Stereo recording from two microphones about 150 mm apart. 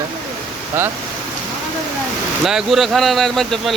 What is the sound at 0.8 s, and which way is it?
Speech, 15° right (ahead or behind).